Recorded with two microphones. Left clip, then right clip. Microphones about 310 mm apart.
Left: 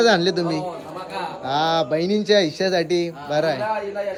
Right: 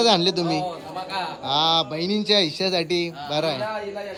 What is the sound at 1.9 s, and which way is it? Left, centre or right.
A man's voice, centre.